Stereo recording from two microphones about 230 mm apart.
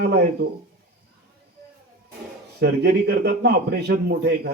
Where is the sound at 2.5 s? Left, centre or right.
Right.